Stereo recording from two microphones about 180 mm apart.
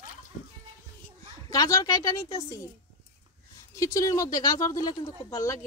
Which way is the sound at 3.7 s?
20° left (ahead or behind).